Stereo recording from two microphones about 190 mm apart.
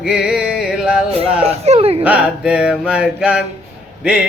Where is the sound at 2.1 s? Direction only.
5° right (ahead or behind).